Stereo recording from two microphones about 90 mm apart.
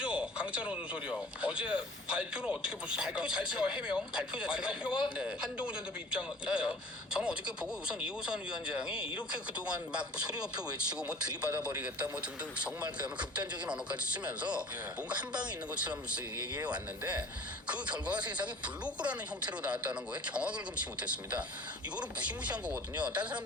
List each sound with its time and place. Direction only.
0.0 s a sound: 10° right (ahead or behind)
1.4 s speech: 10° right (ahead or behind)
13.5 s a man's voice: 15° right (ahead or behind)